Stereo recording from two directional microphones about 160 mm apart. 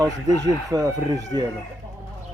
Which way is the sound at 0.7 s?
20° right (ahead or behind).